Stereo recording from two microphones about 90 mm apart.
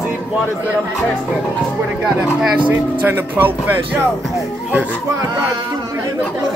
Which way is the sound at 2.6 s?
20° right (ahead or behind).